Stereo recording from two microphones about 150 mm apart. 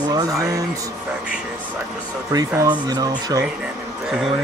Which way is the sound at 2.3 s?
25° right (ahead or behind).